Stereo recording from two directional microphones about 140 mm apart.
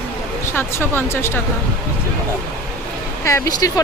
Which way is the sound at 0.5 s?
15° left (ahead or behind).